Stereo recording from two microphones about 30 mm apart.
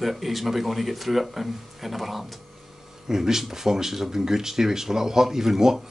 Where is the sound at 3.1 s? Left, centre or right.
Centre.